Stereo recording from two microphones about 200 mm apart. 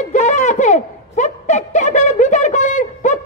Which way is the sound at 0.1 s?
40° left (ahead or behind).